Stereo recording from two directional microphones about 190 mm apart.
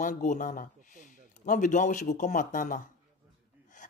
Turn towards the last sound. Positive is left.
turn(degrees=40)  # may be behind; listen again after turning